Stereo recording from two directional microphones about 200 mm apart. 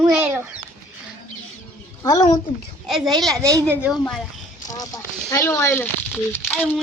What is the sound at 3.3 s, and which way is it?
Speech, 15° right (ahead or behind).